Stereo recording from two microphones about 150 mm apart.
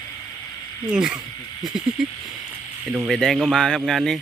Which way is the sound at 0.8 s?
5° right (ahead or behind).